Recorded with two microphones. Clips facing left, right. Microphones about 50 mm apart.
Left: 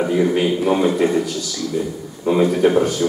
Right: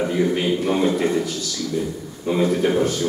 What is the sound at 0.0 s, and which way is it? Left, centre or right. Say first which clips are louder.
A man's voice: left 3 dB; centre.